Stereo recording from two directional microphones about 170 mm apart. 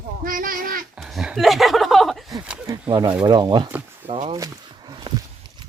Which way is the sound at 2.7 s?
25° right (ahead or behind).